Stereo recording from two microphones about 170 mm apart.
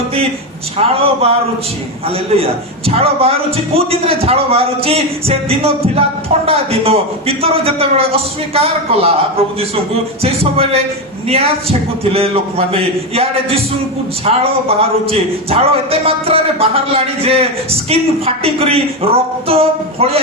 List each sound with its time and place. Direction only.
0.8 s a man's voice: 35° right (ahead or behind)
14.3 s a man's voice: 40° right (ahead or behind)